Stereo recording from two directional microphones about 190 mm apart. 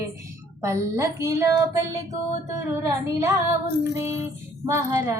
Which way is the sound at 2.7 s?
15° right (ahead or behind).